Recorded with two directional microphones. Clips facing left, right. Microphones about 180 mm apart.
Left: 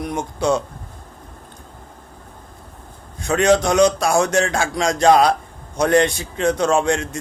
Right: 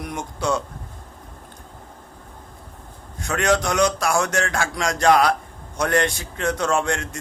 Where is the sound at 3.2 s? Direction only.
25° left (ahead or behind).